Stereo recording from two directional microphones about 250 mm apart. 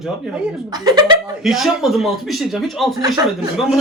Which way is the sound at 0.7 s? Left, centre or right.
Centre.